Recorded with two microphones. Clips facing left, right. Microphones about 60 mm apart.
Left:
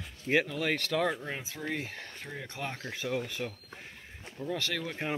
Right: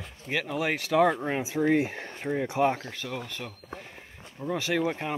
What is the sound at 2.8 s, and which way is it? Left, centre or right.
Speech, centre.